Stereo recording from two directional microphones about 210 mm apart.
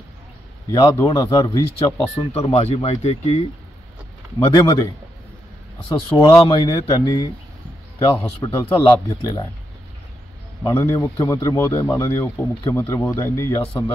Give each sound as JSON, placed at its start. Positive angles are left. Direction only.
{"t": 0.7, "sound": "speech", "side_deg": 15}
{"t": 2.3, "sound": "a man's voice", "side_deg": 30}
{"t": 6.1, "sound": "a man's voice", "side_deg": 15}
{"t": 10.6, "sound": "speech", "side_deg": 15}